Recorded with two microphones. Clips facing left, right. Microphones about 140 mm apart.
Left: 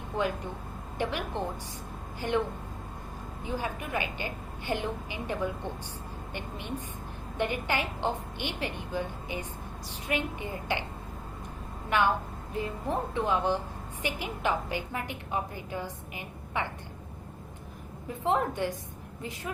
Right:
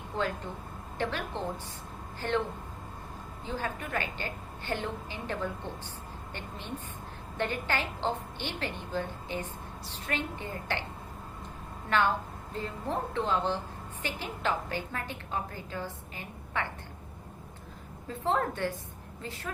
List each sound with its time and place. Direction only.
0.2 s a woman's voice: 15° left (ahead or behind)
3.4 s a woman's voice: 15° left (ahead or behind)
11.9 s a woman's voice: 15° left (ahead or behind)
18.1 s a woman's voice: 15° left (ahead or behind)